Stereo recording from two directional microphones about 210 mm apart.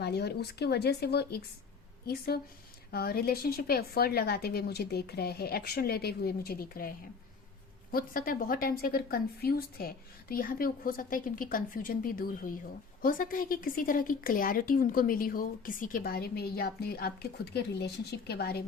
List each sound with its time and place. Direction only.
0.0 s a woman's voice: 50° left (ahead or behind)